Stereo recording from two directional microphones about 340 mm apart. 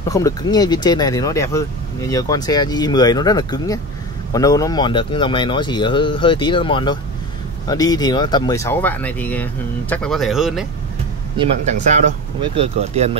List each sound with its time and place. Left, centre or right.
0.1 s speech: centre
11.8 s speech: centre